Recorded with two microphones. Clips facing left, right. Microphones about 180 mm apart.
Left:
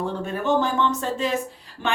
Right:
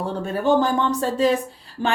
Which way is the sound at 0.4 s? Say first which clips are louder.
Right 3 dB; 35° right (ahead or behind).